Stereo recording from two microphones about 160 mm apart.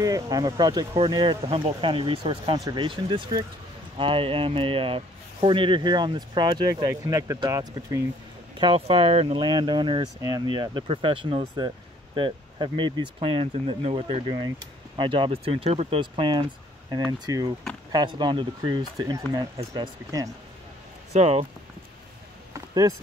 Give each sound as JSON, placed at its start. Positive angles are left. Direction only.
{"t": 0.0, "sound": "speech", "side_deg": -20}
{"t": 8.5, "sound": "speech", "side_deg": -35}
{"t": 21.1, "sound": "speech", "side_deg": -40}
{"t": 22.5, "sound": "a sound", "side_deg": -20}